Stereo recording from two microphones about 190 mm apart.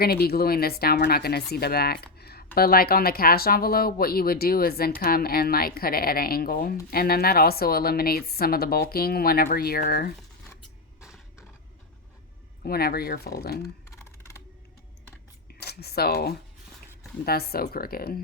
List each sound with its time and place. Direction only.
0.0 s speech: 55° left (ahead or behind)
2.1 s typing: 55° left (ahead or behind)
2.6 s a woman's voice: 50° left (ahead or behind)
12.6 s a woman's voice: 55° left (ahead or behind)
13.9 s typing: 15° left (ahead or behind)
15.6 s a woman's voice: 55° left (ahead or behind)